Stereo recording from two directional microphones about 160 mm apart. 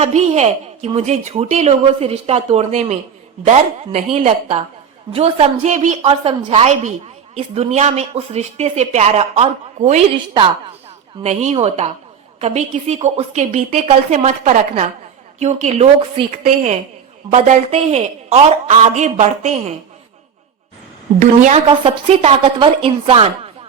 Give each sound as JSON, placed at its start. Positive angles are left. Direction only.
{"t": 0.0, "sound": "a woman's voice", "side_deg": -45}
{"t": 21.2, "sound": "speech", "side_deg": -45}
{"t": 21.7, "sound": "speech", "side_deg": -35}